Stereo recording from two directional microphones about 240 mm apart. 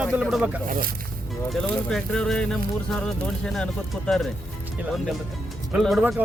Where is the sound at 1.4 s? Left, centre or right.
Centre.